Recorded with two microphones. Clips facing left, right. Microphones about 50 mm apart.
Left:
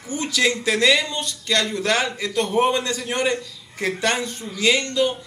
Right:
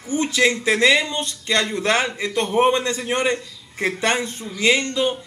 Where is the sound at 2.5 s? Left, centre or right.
Centre.